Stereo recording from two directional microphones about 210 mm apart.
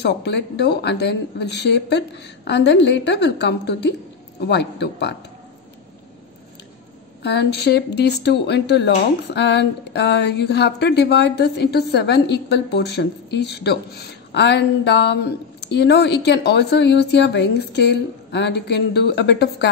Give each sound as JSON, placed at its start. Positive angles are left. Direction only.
{"t": 0.0, "sound": "speech", "side_deg": 55}
{"t": 7.2, "sound": "speech", "side_deg": 55}